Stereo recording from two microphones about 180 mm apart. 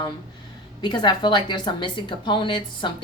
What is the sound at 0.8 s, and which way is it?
A woman's voice, 25° left (ahead or behind).